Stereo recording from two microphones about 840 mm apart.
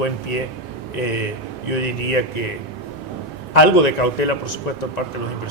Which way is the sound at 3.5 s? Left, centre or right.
Left.